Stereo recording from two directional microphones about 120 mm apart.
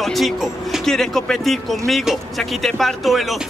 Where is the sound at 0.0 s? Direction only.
Centre (ahead or behind).